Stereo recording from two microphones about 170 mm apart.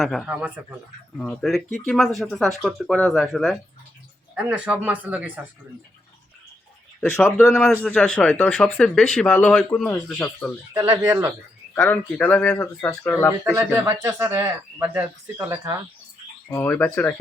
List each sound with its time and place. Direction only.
0.0 s speech: centre (ahead or behind)
1.1 s speech: 5° left (ahead or behind)
7.0 s speech: 15° left (ahead or behind)
7.5 s speech: 5° left (ahead or behind)
10.8 s speech: 20° right (ahead or behind)
11.8 s speech: 10° left (ahead or behind)
13.5 s speech: 10° right (ahead or behind)
16.5 s speech: 15° left (ahead or behind)